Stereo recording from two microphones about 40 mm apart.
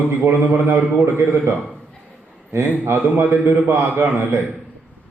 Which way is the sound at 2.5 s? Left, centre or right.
Right.